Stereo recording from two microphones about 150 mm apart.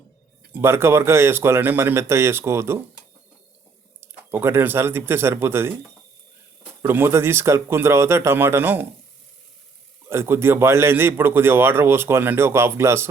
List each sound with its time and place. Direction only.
0.5 s a man's voice: 15° right (ahead or behind)
4.0 s a man's voice: 15° right (ahead or behind)
6.8 s a man's voice: 15° right (ahead or behind)
10.1 s a man's voice: 15° right (ahead or behind)